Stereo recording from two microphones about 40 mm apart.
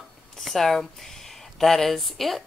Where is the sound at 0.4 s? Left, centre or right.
Centre.